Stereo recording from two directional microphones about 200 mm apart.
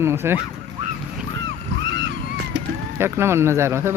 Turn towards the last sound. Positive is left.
turn(degrees=-10)  # may be behind; listen again after turning